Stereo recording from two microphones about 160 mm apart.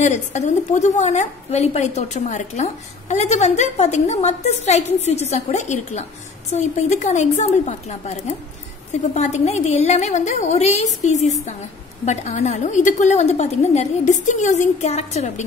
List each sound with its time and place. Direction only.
0.0 s a woman's voice: 45° left (ahead or behind)